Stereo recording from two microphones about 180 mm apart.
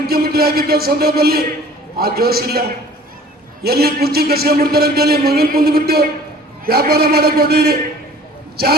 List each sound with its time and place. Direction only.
0.1 s a man's voice: 60° right (ahead or behind)